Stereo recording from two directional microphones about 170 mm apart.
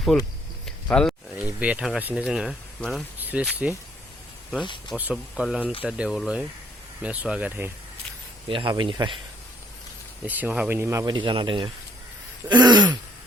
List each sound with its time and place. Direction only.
0.6 s a sound: 5° left (ahead or behind)
1.5 s speech: 5° right (ahead or behind)
3.2 s a sound: 10° right (ahead or behind)
3.6 s speech: 5° right (ahead or behind)
4.6 s speech: 25° left (ahead or behind)
4.9 s speech: 5° right (ahead or behind)
8.4 s speech: 30° right (ahead or behind)
10.2 s speech: 10° right (ahead or behind); by 11.7 s 30° right (ahead or behind)
12.5 s throat clearing: 25° right (ahead or behind)